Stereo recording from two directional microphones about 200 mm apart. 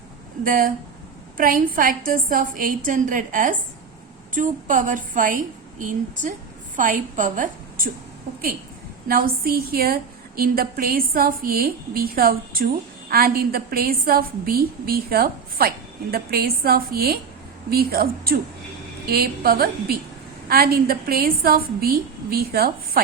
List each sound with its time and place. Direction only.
0.4 s a woman's voice: 45° right (ahead or behind)
9.0 s a woman's voice: 45° right (ahead or behind)